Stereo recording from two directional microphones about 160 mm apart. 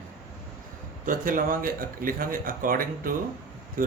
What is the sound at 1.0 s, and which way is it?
Speech, 60° right (ahead or behind).